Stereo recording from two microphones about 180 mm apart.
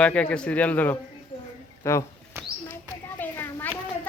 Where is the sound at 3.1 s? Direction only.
10° left (ahead or behind).